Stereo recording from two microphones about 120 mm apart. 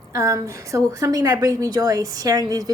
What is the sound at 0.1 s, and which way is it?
A woman's voice, 25° right (ahead or behind).